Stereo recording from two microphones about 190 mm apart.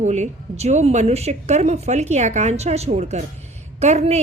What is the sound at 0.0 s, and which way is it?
A woman's voice, 35° right (ahead or behind).